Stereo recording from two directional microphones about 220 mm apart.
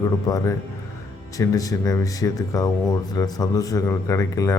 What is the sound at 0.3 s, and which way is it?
A man's voice, 15° left (ahead or behind).